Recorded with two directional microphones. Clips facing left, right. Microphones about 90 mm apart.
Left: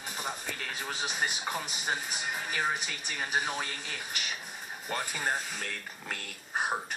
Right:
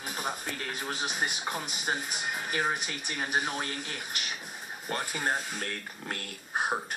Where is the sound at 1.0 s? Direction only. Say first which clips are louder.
Left 2 dB; 5° right (ahead or behind).